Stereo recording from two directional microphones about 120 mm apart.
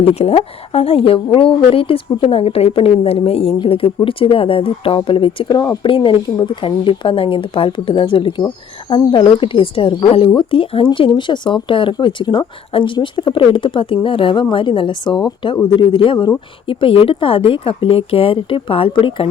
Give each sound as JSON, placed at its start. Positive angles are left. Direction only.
{"t": 0.0, "sound": "speech", "side_deg": 55}